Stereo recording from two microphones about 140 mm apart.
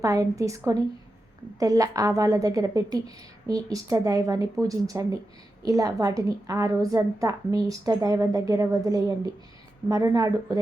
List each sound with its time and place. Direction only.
0.0 s a woman's voice: 25° right (ahead or behind)